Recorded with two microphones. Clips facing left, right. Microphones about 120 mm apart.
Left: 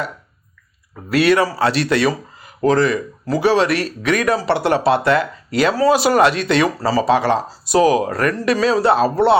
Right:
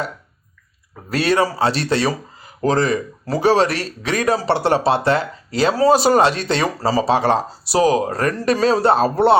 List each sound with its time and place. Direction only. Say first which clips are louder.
1.1 s speech: left 3 dB; 35° right (ahead or behind)